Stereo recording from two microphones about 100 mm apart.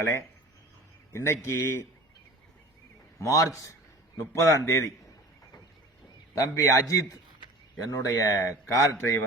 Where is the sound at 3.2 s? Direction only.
35° left (ahead or behind).